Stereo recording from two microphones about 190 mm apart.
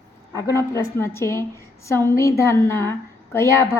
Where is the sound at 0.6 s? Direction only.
15° left (ahead or behind).